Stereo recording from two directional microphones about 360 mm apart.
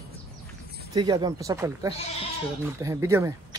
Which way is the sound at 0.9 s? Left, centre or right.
Centre.